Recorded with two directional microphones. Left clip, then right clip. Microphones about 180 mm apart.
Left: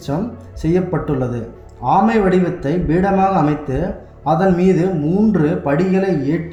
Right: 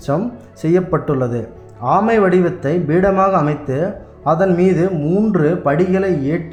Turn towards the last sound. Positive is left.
turn(degrees=-50)  # may be behind; listen again after turning